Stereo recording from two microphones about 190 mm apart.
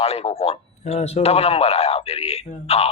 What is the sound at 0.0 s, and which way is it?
A man's voice, 30° left (ahead or behind).